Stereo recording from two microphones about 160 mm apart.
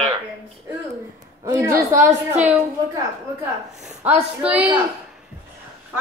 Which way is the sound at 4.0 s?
10° right (ahead or behind).